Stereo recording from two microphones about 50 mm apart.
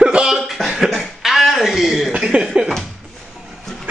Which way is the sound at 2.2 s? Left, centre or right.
Centre.